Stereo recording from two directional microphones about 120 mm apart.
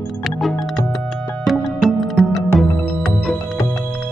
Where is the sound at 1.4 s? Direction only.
Centre (ahead or behind).